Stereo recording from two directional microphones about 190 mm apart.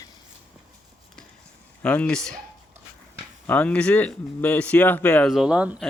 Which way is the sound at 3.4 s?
5° left (ahead or behind).